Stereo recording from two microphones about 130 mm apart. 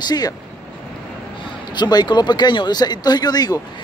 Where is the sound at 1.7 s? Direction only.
35° left (ahead or behind).